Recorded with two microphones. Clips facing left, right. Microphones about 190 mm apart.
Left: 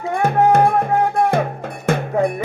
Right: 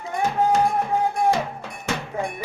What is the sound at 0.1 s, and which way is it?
Music, 60° left (ahead or behind).